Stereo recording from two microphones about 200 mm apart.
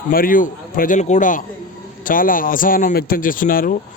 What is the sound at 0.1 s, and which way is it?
Speech, 45° left (ahead or behind).